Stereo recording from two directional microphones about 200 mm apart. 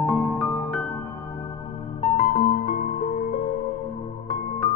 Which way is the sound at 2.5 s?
40° left (ahead or behind).